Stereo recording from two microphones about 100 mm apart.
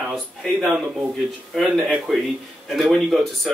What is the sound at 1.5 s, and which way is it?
Speech, centre (ahead or behind).